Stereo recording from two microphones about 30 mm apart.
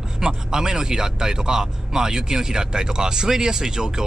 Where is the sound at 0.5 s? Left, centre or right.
Right.